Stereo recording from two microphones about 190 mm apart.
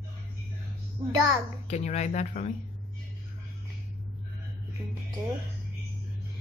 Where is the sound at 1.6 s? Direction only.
35° left (ahead or behind).